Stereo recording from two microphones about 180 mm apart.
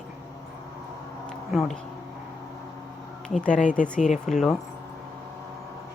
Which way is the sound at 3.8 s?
45° left (ahead or behind).